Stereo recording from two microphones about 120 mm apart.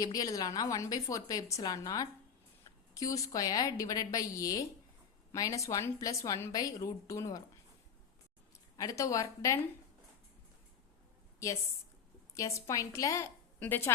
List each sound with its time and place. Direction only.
0.0 s a woman's voice: 30° left (ahead or behind)
8.7 s a woman's voice: 30° left (ahead or behind)
11.3 s a woman's voice: 25° left (ahead or behind)